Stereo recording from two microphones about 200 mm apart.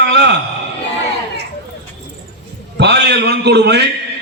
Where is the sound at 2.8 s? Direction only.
60° right (ahead or behind).